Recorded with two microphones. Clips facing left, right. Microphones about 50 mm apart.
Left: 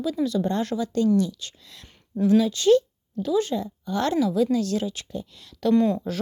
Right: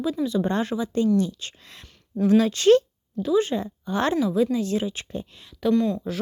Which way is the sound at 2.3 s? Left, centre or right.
Right.